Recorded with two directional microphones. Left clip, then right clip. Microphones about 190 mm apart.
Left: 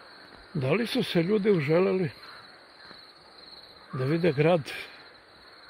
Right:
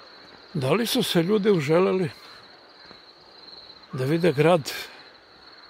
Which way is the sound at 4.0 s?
15° right (ahead or behind).